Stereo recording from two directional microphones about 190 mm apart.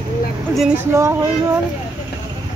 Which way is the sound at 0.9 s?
15° right (ahead or behind).